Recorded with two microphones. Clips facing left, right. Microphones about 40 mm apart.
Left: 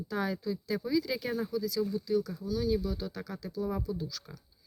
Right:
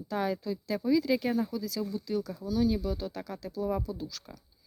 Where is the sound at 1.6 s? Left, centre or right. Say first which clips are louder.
Left 2 dB; right.